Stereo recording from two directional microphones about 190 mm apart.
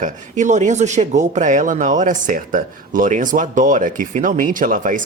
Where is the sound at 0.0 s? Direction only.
40° right (ahead or behind).